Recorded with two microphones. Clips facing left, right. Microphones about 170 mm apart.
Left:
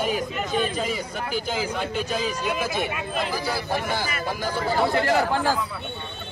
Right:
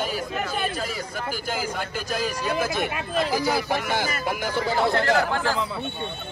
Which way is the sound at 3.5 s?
20° right (ahead or behind).